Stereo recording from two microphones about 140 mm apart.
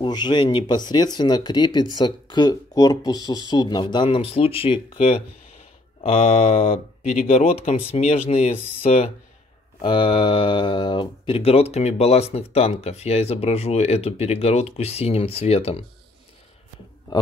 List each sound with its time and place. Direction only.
0.0 s speech: 30° left (ahead or behind)
9.8 s speech: 35° left (ahead or behind)